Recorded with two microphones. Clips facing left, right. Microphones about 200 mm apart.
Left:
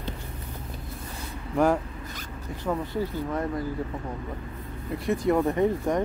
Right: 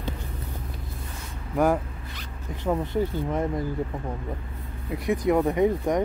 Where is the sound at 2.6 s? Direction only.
20° right (ahead or behind).